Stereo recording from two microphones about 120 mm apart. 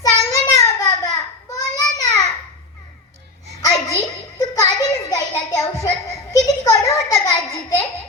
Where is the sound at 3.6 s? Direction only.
25° left (ahead or behind).